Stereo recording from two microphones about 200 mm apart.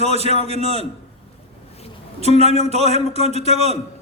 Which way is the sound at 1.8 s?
30° left (ahead or behind).